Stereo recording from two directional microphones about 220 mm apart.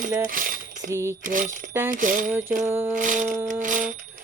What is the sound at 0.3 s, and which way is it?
Coin, 40° right (ahead or behind).